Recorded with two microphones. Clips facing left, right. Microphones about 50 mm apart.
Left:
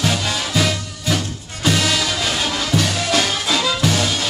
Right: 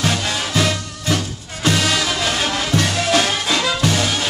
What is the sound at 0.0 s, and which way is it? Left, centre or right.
Music, centre.